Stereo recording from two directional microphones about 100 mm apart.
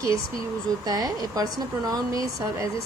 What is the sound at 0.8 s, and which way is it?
Speech, 40° right (ahead or behind).